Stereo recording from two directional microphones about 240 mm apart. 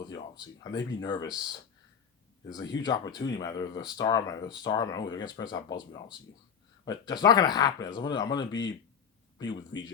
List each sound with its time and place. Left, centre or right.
0.0 s speech: centre
2.5 s speech: centre